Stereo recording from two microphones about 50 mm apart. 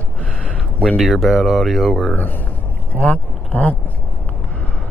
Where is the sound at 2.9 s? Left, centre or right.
Left.